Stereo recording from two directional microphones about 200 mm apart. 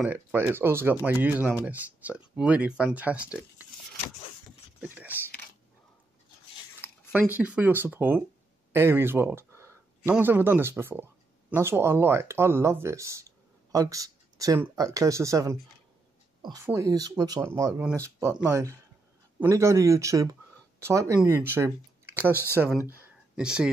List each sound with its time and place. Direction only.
0.0 s speech: 10° right (ahead or behind)
4.7 s speech: 10° right (ahead or behind)
6.8 s a sound: 10° right (ahead or behind)
7.3 s speech: 5° right (ahead or behind)
22.2 s speech: 10° left (ahead or behind)
22.8 s a sound: 5° right (ahead or behind)